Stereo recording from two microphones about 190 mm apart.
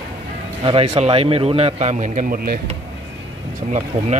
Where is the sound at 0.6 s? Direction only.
30° right (ahead or behind); by 2.6 s 50° right (ahead or behind).